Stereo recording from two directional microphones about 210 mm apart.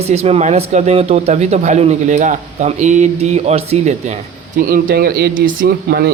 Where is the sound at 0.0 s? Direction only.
30° right (ahead or behind).